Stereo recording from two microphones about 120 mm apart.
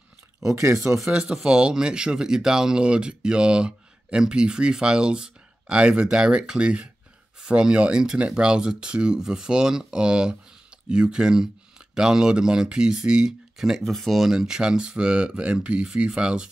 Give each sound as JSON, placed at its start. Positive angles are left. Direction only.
{"t": 0.4, "sound": "speech", "side_deg": -25}
{"t": 1.0, "sound": "speech", "side_deg": -5}